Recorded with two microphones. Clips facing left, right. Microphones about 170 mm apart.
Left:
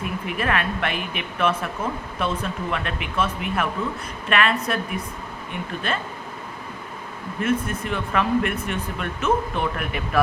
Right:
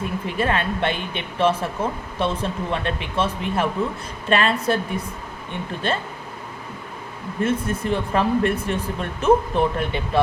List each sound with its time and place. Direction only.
0.0 s speech: 30° right (ahead or behind)
7.4 s speech: 30° right (ahead or behind)